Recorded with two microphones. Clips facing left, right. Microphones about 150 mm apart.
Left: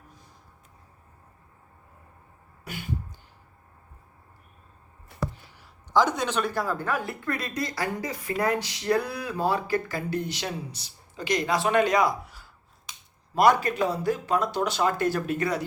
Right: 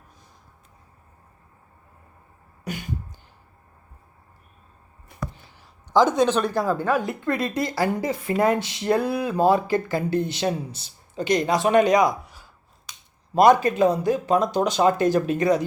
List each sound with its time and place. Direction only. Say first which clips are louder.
5.9 s a woman's voice: right 6 dB; 25° right (ahead or behind)